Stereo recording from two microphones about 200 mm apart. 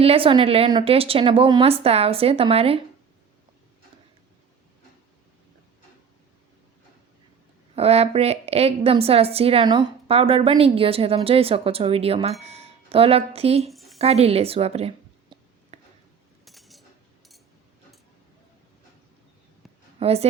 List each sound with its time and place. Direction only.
0.0 s a woman's voice: 30° right (ahead or behind)
7.8 s a woman's voice: 30° right (ahead or behind)
13.7 s a sound: centre (ahead or behind)
14.0 s a sound: 30° right (ahead or behind)
16.5 s cutlery: centre (ahead or behind)
20.0 s a woman's voice: 30° right (ahead or behind)